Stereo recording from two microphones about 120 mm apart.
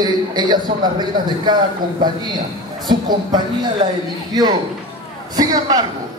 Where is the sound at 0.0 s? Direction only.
35° right (ahead or behind).